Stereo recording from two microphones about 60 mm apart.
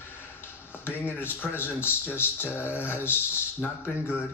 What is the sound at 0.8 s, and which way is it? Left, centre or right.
Speech, left.